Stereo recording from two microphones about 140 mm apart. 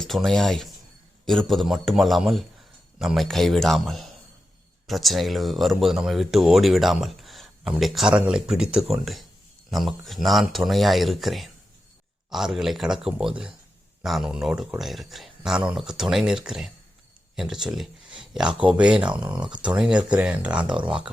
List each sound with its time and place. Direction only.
0.0 s speech: 5° left (ahead or behind)
18.2 s a sound: 5° right (ahead or behind)
18.7 s speech: 10° right (ahead or behind)
19.1 s speech: 30° right (ahead or behind)
19.6 s speech: 5° right (ahead or behind)